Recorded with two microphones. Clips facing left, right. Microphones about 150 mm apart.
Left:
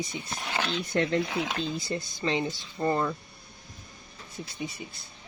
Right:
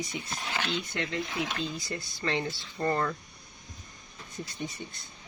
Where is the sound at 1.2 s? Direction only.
75° left (ahead or behind).